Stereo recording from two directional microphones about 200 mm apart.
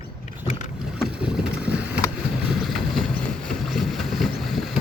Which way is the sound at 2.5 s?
Centre (ahead or behind).